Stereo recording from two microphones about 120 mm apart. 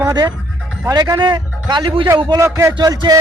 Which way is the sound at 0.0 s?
25° right (ahead or behind).